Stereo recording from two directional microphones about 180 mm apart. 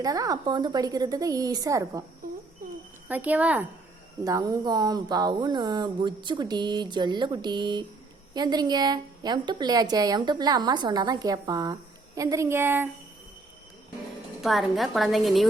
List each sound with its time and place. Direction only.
0.0 s a woman's voice: 20° right (ahead or behind)
2.6 s a sound: 50° right (ahead or behind)
3.1 s speech: 10° right (ahead or behind)
4.2 s a woman's voice: 20° right (ahead or behind)
14.4 s a woman's voice: centre (ahead or behind)